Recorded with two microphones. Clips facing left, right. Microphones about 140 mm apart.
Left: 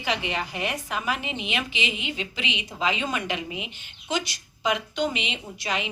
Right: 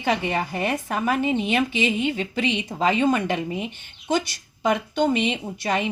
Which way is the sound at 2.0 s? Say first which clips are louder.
Right 8 dB; 50° right (ahead or behind).